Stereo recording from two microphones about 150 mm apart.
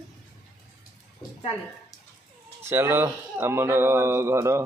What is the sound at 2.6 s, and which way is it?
A man's voice, 15° right (ahead or behind).